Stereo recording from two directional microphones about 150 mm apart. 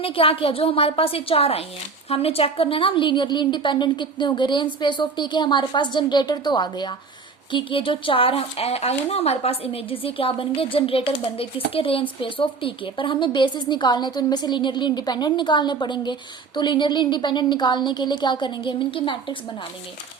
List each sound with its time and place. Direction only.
0.0 s a woman's voice: 40° left (ahead or behind)